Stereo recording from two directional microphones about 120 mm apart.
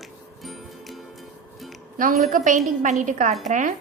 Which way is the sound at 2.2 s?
90° right.